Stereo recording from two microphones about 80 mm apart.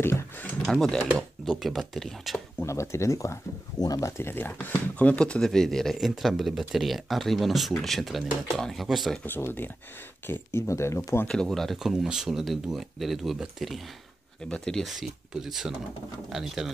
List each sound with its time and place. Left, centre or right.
0.7 s speech: centre
2.6 s speech: left
3.8 s speech: left
4.2 s speech: left; by 9.2 s centre
9.2 s speech: left
11.2 s speech: centre
14.4 s speech: centre
14.9 s speech: centre